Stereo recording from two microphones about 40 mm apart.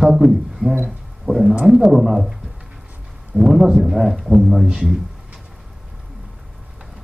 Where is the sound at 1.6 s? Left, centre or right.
Centre.